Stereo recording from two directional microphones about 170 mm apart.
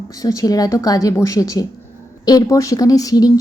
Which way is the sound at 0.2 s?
20° left (ahead or behind).